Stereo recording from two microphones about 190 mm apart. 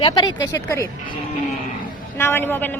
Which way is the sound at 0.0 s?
25° left (ahead or behind).